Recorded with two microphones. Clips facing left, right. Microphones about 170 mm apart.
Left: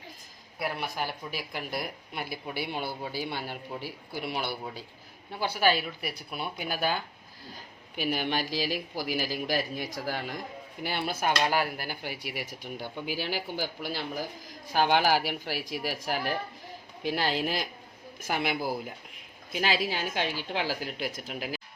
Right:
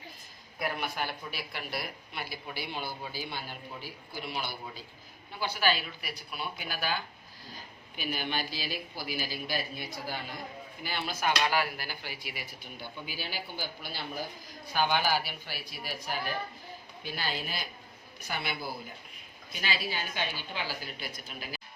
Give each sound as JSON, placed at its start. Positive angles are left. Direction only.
{"t": 1.3, "sound": "speech", "side_deg": 40}
{"t": 3.1, "sound": "speech", "side_deg": 70}
{"t": 5.4, "sound": "speech", "side_deg": 55}
{"t": 7.9, "sound": "speech", "side_deg": 75}
{"t": 10.8, "sound": "speech", "side_deg": 60}